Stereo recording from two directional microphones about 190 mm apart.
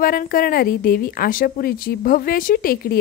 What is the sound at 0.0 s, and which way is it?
Speech, 50° left (ahead or behind).